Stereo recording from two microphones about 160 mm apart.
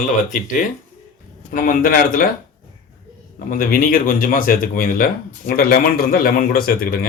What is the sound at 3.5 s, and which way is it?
Speech, 60° left (ahead or behind).